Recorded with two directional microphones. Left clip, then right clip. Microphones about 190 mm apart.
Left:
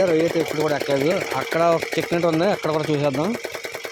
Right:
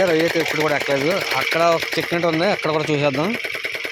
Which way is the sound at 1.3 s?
20° left (ahead or behind).